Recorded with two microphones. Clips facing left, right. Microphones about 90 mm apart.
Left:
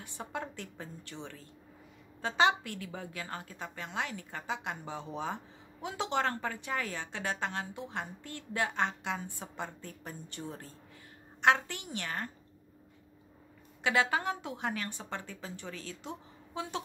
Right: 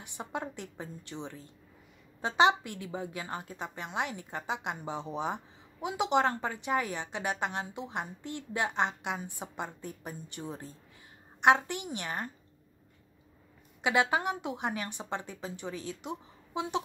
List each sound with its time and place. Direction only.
0.0 s a woman's voice: 20° right (ahead or behind)
13.8 s a woman's voice: 20° right (ahead or behind)